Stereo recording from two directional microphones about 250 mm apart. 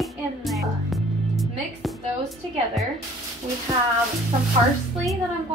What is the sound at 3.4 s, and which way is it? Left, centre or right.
Speech, right.